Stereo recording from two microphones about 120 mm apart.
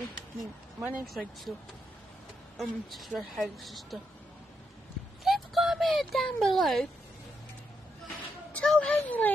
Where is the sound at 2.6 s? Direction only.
Centre (ahead or behind).